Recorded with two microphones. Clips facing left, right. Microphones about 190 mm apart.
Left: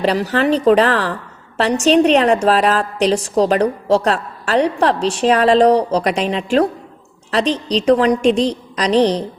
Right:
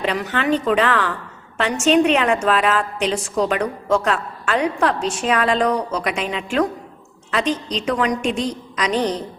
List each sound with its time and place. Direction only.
0.0 s a woman's voice: 35° left (ahead or behind)